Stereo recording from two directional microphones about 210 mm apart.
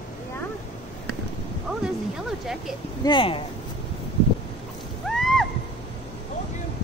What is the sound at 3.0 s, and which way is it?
Speech, 25° left (ahead or behind).